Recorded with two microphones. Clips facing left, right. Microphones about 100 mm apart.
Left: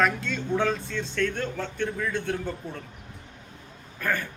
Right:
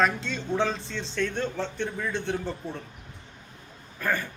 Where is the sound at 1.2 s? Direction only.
15° right (ahead or behind).